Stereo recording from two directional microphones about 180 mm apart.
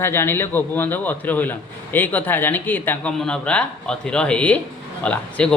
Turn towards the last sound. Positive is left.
turn(degrees=5)  # may be behind; listen again after turning